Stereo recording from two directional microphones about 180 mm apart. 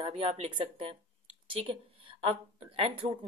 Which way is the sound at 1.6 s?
30° right (ahead or behind).